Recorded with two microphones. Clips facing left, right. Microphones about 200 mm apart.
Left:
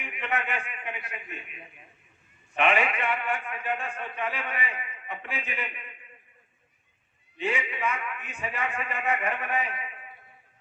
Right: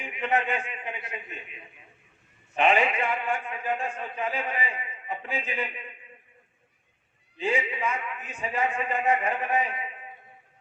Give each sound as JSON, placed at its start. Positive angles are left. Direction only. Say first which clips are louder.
{"t": 0.0, "sound": "a man's voice", "louder": "right 5 dB", "side_deg": -30}
{"t": 7.3, "sound": "a man's voice", "louder": "right 3 dB", "side_deg": -30}